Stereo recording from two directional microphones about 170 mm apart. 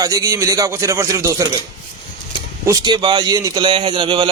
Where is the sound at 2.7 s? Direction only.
20° right (ahead or behind).